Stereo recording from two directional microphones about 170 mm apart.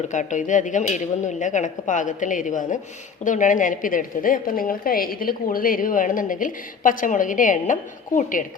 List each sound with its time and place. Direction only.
0.1 s a woman's voice: 45° left (ahead or behind)